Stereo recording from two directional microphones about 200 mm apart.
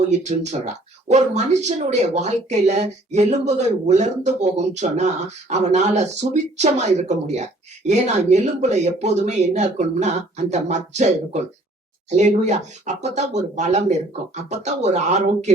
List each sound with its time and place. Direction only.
0.1 s speech: 35° right (ahead or behind)
12.1 s speech: 35° right (ahead or behind)